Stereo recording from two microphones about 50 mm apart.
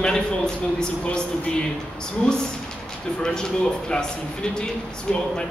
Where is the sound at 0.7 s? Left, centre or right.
Centre.